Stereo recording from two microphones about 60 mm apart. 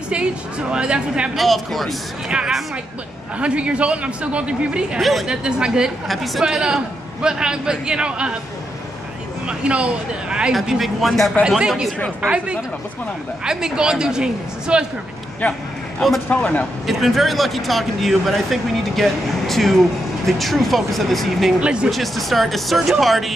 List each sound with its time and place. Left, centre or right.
0.1 s a man's voice: centre
1.3 s speech: centre
2.2 s a woman's voice: centre
5.0 s speech: centre
5.3 s a man's voice: centre
6.0 s a man's voice: centre
9.5 s a man's voice: centre
10.5 s speech: centre
11.4 s a man's voice: centre
15.4 s speech: left
16.8 s speech: centre
21.5 s a man's voice: centre
21.9 s speech: centre